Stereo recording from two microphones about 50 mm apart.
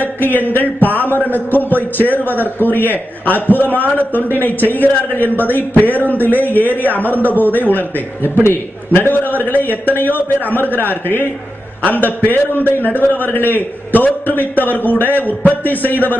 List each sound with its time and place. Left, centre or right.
0.0 s a sound: left
0.9 s a man's voice: left
12.3 s a man's voice: left